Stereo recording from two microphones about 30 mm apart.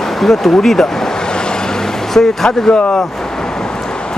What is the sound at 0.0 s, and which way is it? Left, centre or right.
Vehicle, centre.